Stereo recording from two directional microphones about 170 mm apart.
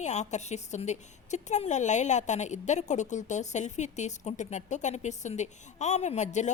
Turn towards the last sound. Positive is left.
turn(degrees=45)  # may be behind; listen again after turning